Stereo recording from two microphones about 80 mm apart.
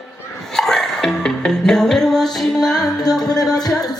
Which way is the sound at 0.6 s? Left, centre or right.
Centre.